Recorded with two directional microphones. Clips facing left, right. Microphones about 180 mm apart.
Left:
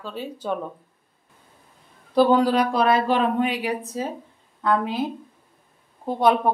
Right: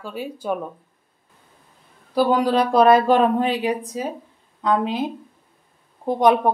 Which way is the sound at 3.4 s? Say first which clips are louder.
Right 4 dB; 25° right (ahead or behind).